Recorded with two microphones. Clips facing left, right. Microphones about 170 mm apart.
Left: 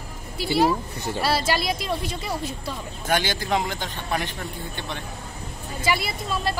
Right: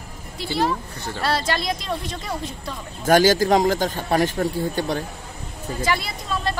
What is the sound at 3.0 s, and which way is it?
Speech, 40° right (ahead or behind).